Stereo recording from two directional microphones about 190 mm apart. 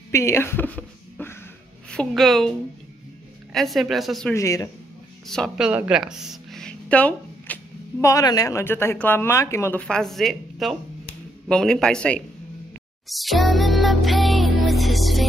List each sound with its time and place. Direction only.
0.1 s a sound: 15° left (ahead or behind)
1.9 s a man's voice: 5° left (ahead or behind)
3.5 s a man's voice: centre (ahead or behind)
4.3 s speech: 15° left (ahead or behind)
5.2 s a woman's voice: centre (ahead or behind)
13.1 s music: centre (ahead or behind)